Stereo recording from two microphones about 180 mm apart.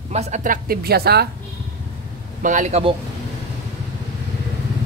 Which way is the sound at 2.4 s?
45° right (ahead or behind).